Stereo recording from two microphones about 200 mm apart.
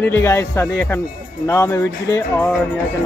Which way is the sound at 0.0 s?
10° left (ahead or behind).